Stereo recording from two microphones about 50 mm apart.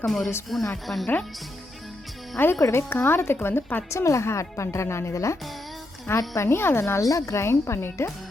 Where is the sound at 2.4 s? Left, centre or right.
Left.